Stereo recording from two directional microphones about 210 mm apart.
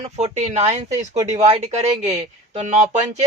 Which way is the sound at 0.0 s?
35° right (ahead or behind).